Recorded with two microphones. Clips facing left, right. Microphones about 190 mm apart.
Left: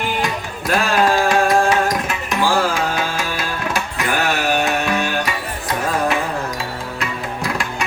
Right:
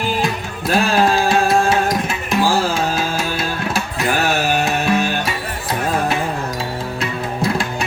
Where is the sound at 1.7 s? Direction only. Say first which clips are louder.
Right 1 dB; 30° right (ahead or behind).